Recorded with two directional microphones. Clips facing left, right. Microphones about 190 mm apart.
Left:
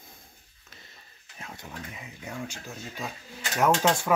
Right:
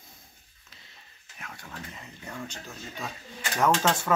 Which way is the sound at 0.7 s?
50° left (ahead or behind).